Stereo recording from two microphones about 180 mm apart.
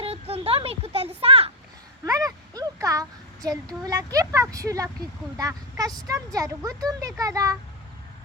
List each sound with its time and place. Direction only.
0.0 s a sound: 35° right (ahead or behind)
2.0 s child singing: 20° right (ahead or behind)
5.4 s speech: 20° right (ahead or behind)